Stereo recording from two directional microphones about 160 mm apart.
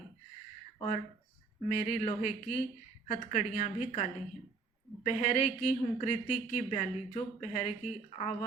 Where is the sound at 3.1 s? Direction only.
40° left (ahead or behind).